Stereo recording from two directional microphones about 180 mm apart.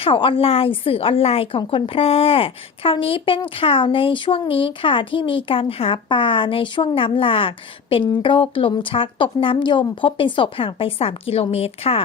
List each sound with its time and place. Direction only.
0.0 s a woman's voice: 30° left (ahead or behind)